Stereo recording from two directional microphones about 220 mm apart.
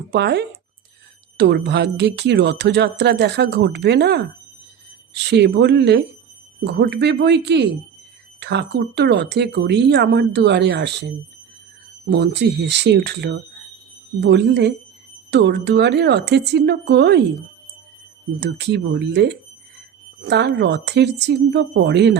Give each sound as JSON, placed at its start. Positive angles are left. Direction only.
{"t": 0.1, "sound": "speech", "side_deg": -50}
{"t": 5.3, "sound": "speech", "side_deg": -50}
{"t": 12.1, "sound": "speech", "side_deg": -50}
{"t": 18.3, "sound": "speech", "side_deg": -50}